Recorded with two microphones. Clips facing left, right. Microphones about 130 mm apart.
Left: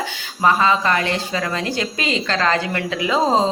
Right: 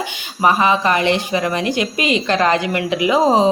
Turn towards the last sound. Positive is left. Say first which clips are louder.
# right 4 dB
turn(degrees=-15)  # may be behind; listen again after turning